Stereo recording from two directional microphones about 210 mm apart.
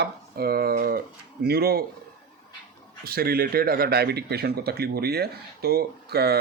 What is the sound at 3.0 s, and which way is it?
Speech, 45° right (ahead or behind).